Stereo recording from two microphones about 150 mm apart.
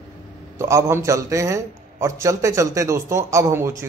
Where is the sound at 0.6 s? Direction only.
20° right (ahead or behind).